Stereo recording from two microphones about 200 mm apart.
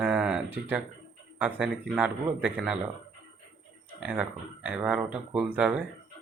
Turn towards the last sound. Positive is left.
turn(degrees=-5)  # may be behind; listen again after turning